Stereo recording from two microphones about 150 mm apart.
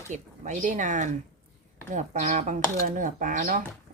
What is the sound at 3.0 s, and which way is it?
Speech, 65° right (ahead or behind).